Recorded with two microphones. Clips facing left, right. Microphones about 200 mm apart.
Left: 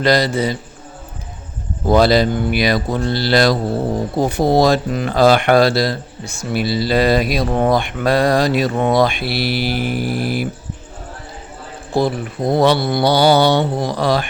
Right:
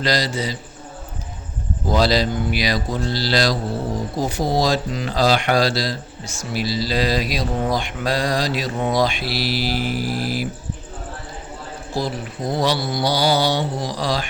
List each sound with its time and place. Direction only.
0.0 s speech: 55° left (ahead or behind)
1.9 s speech: 55° left (ahead or behind)
11.9 s speech: 55° left (ahead or behind)